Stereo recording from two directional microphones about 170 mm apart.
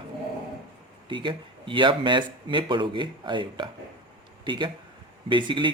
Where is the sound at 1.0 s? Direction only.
30° right (ahead or behind).